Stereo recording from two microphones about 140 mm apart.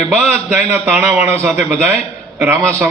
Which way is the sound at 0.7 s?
20° right (ahead or behind).